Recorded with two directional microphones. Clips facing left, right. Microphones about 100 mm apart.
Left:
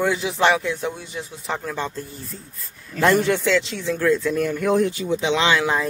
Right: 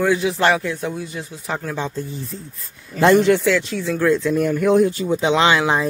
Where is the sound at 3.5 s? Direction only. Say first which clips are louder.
Right 1 dB; 10° right (ahead or behind).